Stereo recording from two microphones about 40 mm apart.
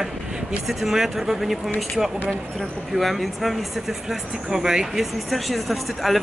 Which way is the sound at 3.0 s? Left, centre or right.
Centre.